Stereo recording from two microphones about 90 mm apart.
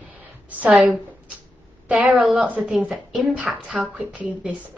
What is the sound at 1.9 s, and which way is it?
A woman's voice, 5° right (ahead or behind).